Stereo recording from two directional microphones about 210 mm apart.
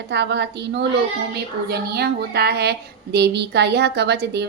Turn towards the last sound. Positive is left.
turn(degrees=-50)  # may be behind; listen again after turning